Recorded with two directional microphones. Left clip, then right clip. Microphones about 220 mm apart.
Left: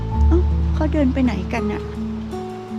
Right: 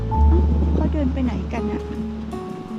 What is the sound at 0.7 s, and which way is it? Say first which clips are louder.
Speech: left 6 dB; 25° left (ahead or behind).